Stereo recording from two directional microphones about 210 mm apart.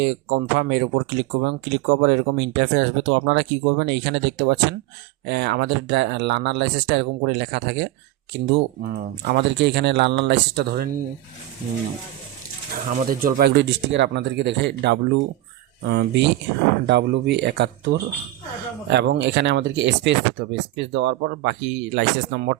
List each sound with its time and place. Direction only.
0.0 s speech: 55° right (ahead or behind)
12.7 s speech: 45° right (ahead or behind)